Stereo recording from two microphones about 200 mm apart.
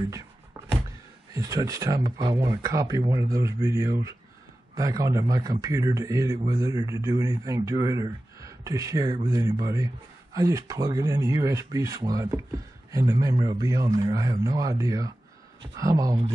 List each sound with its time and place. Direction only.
1.3 s a man's voice: 15° right (ahead or behind)